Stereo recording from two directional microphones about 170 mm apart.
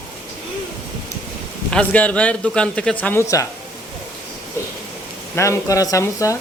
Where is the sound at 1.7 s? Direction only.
5° left (ahead or behind).